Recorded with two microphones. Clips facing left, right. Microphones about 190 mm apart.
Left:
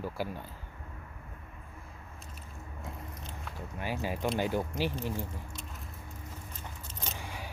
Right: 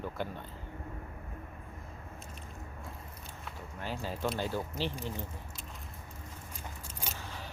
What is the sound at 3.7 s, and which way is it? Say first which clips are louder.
Speech: left 4 dB; 10° left (ahead or behind).